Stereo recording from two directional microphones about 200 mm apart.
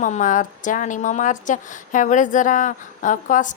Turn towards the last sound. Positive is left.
turn(degrees=40)  # may be behind; listen again after turning